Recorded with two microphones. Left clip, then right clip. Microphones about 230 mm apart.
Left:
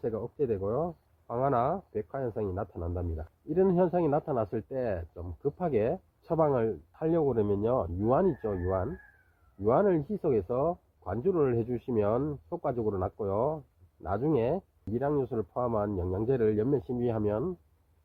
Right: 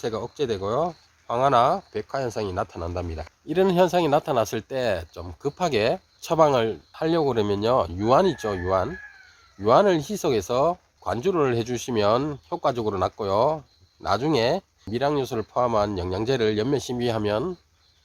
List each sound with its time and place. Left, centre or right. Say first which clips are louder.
0.0 s speech: right 5 dB; right
0.3 s speech: right 6 dB; right